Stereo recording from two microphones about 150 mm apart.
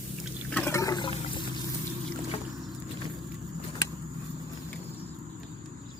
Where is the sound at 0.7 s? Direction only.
25° left (ahead or behind).